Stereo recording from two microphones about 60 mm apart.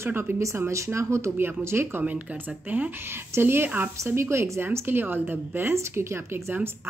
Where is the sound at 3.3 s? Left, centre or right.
Right.